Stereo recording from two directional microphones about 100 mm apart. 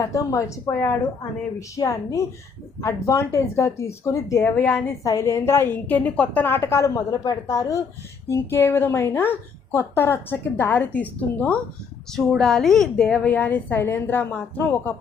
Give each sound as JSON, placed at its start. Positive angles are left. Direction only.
{"t": 0.0, "sound": "a woman's voice", "side_deg": 35}
{"t": 12.1, "sound": "a woman's voice", "side_deg": 5}